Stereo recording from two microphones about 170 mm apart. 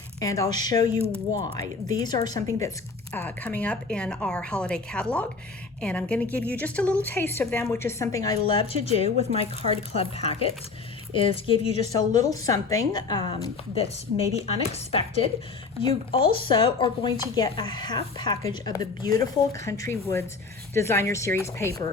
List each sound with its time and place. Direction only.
0.2 s a woman's voice: 20° left (ahead or behind)
11.9 s a woman's voice: 20° left (ahead or behind); by 15.3 s 35° left (ahead or behind)
16.6 s a woman's voice: 25° left (ahead or behind)